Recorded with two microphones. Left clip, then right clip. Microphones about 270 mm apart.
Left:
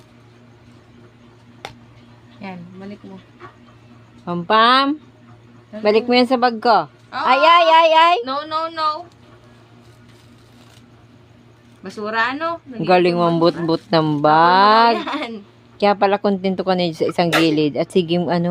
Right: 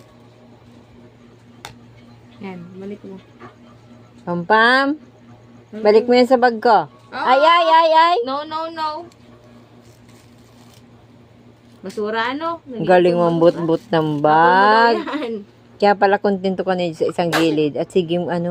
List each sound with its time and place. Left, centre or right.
4.3 s speech: centre
8.2 s speech: centre
11.8 s speech: centre
14.8 s speech: centre
15.8 s speech: centre